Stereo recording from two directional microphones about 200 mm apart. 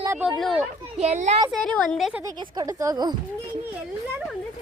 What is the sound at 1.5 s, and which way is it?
Speech, 5° left (ahead or behind).